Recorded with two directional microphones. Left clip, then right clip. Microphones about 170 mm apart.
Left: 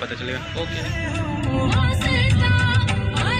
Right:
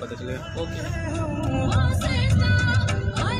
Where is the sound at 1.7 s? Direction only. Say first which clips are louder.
Left 5 dB; 20° right (ahead or behind).